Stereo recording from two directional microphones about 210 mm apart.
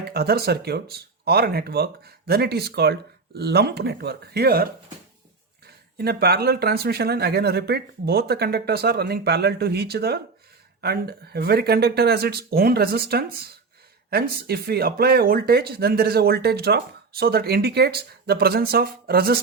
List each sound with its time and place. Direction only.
0.0 s speech: 50° right (ahead or behind)
6.0 s speech: 45° right (ahead or behind)